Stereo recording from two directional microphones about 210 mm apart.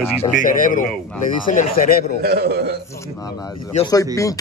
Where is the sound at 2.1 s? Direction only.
45° right (ahead or behind).